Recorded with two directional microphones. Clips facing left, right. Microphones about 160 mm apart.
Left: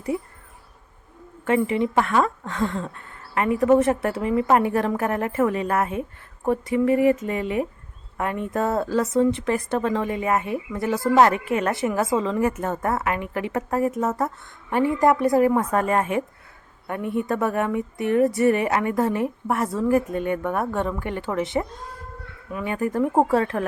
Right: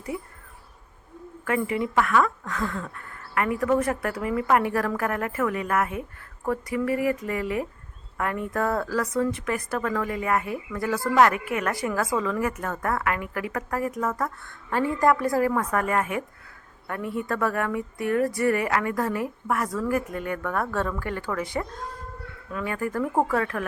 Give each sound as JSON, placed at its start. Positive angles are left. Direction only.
{"t": 0.1, "sound": "speech", "side_deg": 25}
{"t": 1.5, "sound": "speech", "side_deg": 25}